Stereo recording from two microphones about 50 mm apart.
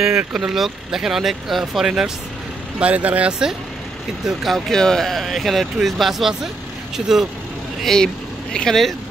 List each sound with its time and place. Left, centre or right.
0.3 s speech: centre
2.8 s speech: right
4.3 s speech: centre
7.8 s speech: centre